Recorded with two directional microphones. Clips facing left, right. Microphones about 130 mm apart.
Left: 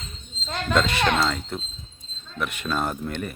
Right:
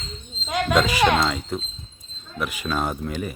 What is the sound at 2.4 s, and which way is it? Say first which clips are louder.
Speech: right 1 dB; centre (ahead or behind).